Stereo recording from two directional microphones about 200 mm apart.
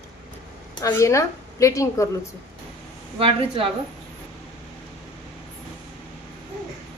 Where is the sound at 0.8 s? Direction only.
15° left (ahead or behind).